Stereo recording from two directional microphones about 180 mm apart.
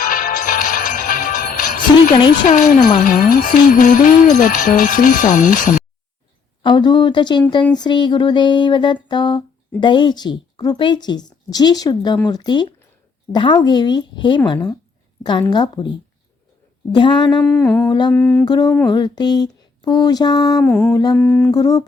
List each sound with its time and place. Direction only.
0.0 s music: 50° left (ahead or behind)
6.6 s a woman's voice: 25° left (ahead or behind)
16.9 s a woman's voice: 25° left (ahead or behind)
17.4 s humming: 10° left (ahead or behind)
17.8 s a woman's voice: 25° left (ahead or behind)
18.1 s humming: 10° left (ahead or behind)
18.4 s a woman's voice: 20° left (ahead or behind)
20.6 s a sound: 5° left (ahead or behind)
21.1 s humming: 5° left (ahead or behind)
21.5 s a woman's voice: 20° left (ahead or behind)